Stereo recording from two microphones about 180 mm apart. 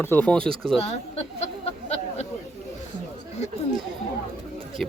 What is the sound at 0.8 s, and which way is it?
Speech, 35° left (ahead or behind).